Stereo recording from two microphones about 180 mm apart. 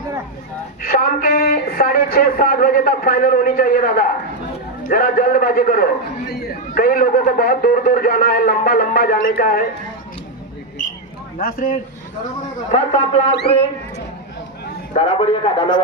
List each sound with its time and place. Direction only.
0.8 s a man's voice: 50° left (ahead or behind)
11.3 s a man's voice: 55° left (ahead or behind)
12.6 s a man's voice: 40° left (ahead or behind)
14.9 s a man's voice: 35° left (ahead or behind)